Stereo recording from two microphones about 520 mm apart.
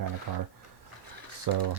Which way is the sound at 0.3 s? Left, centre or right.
Right.